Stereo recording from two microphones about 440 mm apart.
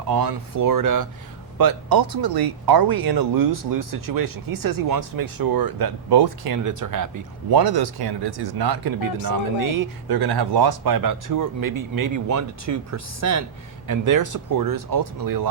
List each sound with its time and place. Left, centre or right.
0.1 s speech: right
7.5 s speech: right